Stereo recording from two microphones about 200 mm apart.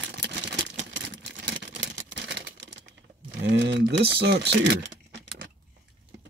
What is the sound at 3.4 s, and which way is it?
Speech, 60° right (ahead or behind).